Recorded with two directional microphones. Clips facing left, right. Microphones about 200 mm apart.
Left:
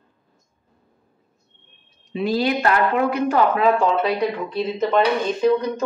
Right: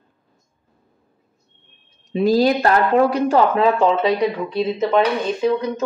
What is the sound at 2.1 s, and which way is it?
A woman's voice, 40° right (ahead or behind).